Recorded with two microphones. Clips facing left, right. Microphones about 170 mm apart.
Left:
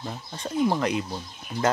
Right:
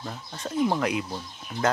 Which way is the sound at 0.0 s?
15° left (ahead or behind).